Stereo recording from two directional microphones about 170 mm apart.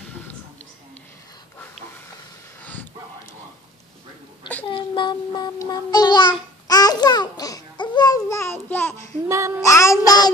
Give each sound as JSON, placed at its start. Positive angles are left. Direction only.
{"t": 2.6, "sound": "a sound", "side_deg": 10}
{"t": 4.6, "sound": "child singing", "side_deg": 30}
{"t": 9.3, "sound": "child singing", "side_deg": -15}
{"t": 9.6, "sound": "child singing", "side_deg": 15}